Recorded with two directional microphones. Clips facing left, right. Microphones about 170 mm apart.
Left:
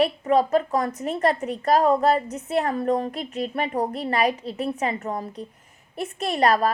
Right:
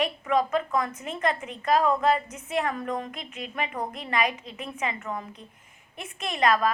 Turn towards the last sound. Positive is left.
turn(degrees=35)  # may be behind; listen again after turning